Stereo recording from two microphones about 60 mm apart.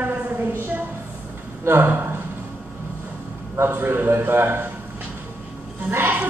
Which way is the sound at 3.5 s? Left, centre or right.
Right.